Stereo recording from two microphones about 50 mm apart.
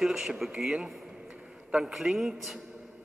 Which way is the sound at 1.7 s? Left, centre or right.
Centre.